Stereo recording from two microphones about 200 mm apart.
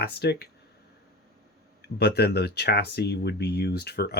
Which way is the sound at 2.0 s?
55° left (ahead or behind).